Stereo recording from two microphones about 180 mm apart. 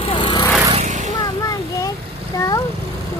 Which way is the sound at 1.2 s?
20° left (ahead or behind).